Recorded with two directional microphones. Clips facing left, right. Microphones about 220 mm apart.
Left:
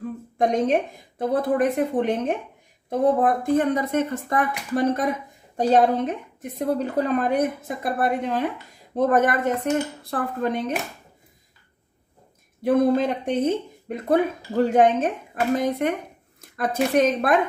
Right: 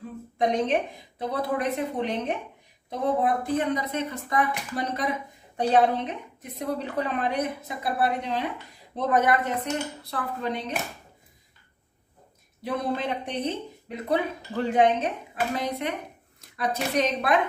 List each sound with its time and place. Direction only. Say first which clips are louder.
0.4 s speech: left 3 dB; 45° left (ahead or behind)
12.6 s a woman's voice: left 9 dB; 50° left (ahead or behind)